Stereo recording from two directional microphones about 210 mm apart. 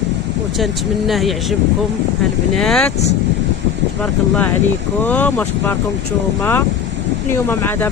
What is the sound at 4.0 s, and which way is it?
Speech, 5° left (ahead or behind).